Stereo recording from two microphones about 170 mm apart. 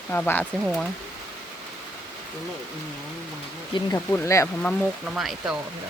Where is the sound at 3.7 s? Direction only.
15° left (ahead or behind).